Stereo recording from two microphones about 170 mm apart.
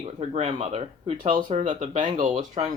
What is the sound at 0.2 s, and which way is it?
Speech, 40° right (ahead or behind).